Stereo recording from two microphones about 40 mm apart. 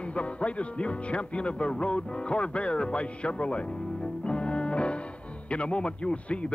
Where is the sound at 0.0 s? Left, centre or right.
Left.